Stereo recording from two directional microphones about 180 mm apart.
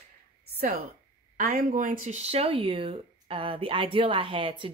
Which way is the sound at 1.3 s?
50° right (ahead or behind).